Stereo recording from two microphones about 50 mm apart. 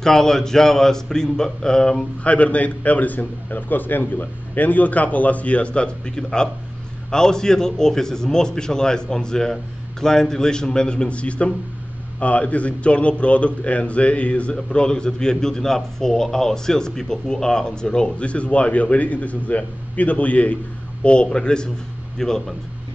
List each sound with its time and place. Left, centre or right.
0.0 s a man's voice: centre
2.2 s a man's voice: left; by 22.3 s centre